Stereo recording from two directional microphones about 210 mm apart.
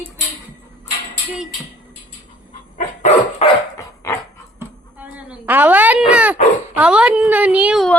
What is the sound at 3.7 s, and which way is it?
Dog, 15° left (ahead or behind).